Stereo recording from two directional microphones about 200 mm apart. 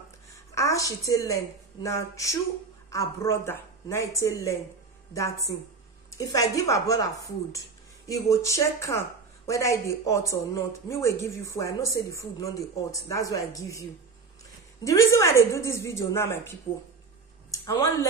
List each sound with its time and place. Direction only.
0.3 s a woman's voice: 15° left (ahead or behind)
6.0 s speech: 15° left (ahead or behind)
14.9 s speech: 15° left (ahead or behind)